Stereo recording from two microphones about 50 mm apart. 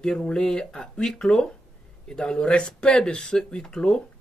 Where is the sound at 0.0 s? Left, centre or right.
Centre.